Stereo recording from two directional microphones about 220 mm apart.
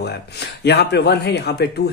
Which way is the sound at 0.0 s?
50° left (ahead or behind).